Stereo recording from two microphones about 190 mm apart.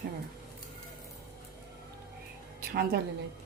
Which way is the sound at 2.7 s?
55° right (ahead or behind).